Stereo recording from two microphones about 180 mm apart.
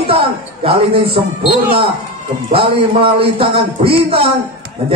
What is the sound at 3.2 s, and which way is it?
Speech, 30° right (ahead or behind).